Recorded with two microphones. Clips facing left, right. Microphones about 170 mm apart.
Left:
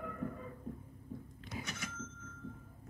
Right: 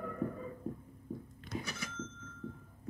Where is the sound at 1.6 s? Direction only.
35° right (ahead or behind).